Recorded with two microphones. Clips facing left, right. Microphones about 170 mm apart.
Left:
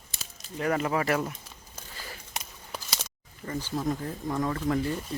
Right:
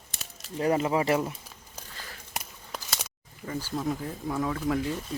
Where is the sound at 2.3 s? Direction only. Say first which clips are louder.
Right 2 dB; 5° right (ahead or behind).